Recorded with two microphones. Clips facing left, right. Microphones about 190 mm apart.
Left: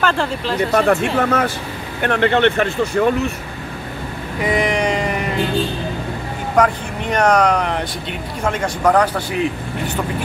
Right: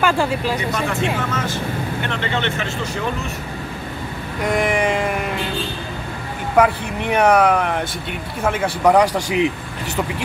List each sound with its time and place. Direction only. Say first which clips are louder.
0.0 s speech: right 1 dB; 10° right (ahead or behind)
0.6 s speech: left 7 dB; 55° left (ahead or behind)
4.4 s a sound: left 1 dB; centre (ahead or behind)
6.5 s speech: right 1 dB; 5° right (ahead or behind)